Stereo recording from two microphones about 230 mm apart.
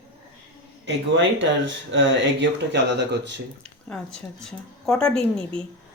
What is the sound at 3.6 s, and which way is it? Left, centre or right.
Speech, centre.